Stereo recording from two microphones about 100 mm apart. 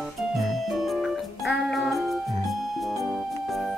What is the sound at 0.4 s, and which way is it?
Music, centre (ahead or behind).